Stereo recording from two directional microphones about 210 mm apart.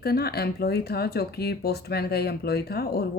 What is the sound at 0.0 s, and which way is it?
Speech, 50° left (ahead or behind).